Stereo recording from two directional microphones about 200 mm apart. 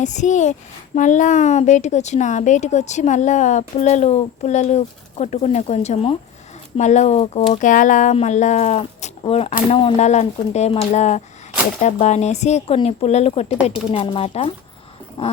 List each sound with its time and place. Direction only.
0.0 s speech: 35° left (ahead or behind)